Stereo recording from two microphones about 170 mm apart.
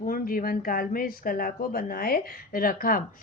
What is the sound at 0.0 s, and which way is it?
Speech, 55° left (ahead or behind).